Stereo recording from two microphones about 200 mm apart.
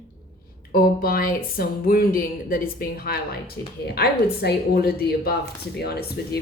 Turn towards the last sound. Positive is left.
turn(degrees=50)  # may be behind; listen again after turning